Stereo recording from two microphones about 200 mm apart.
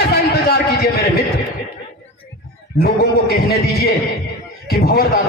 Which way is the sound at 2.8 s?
50° left (ahead or behind).